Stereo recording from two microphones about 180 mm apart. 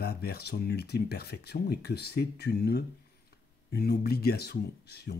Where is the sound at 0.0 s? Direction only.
60° left (ahead or behind).